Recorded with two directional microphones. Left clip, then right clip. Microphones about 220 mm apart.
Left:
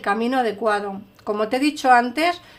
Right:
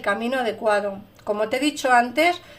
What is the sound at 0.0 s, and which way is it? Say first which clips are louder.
Speech: left 2 dB; 35° left (ahead or behind).